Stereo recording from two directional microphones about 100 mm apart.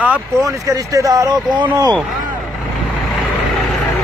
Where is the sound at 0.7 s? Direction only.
35° right (ahead or behind).